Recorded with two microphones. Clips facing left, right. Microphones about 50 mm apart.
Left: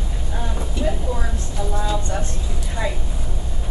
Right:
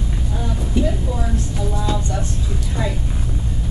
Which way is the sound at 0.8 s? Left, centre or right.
Centre.